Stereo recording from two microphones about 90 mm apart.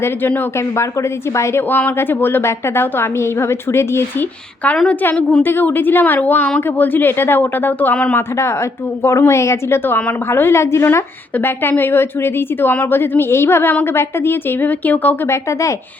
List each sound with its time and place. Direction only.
0.0 s a woman's voice: 25° left (ahead or behind)
1.4 s a woman's voice: 25° left (ahead or behind)
4.9 s a woman's voice: 15° left (ahead or behind)
9.0 s a woman's voice: 30° left (ahead or behind)
15.3 s speech: 35° left (ahead or behind)